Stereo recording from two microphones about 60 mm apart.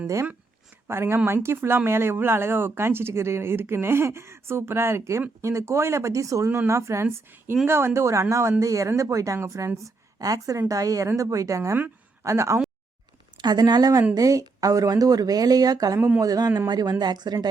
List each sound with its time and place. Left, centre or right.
0.9 s speech: right
6.7 s speech: right
10.2 s a woman's voice: right
14.2 s speech: right
16.0 s speech: right
16.2 s speech: right
16.6 s speech: right